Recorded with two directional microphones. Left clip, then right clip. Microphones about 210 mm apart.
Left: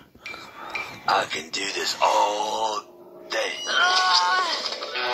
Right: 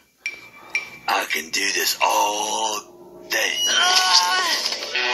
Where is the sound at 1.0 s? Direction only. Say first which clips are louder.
Even; 30° right (ahead or behind).